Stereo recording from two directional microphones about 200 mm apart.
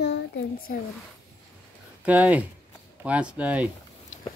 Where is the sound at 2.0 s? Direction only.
5° right (ahead or behind).